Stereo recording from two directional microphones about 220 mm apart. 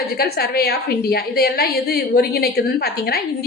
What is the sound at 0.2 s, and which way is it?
A woman's voice, 45° left (ahead or behind).